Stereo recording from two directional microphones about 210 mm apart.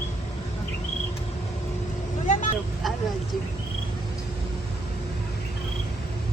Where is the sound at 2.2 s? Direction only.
35° left (ahead or behind).